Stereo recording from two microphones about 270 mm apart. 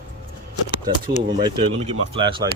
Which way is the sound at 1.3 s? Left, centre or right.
Centre.